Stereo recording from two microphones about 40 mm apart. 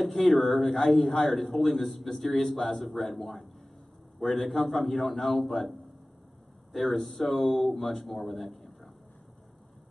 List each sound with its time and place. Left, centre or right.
0.0 s a man's voice: centre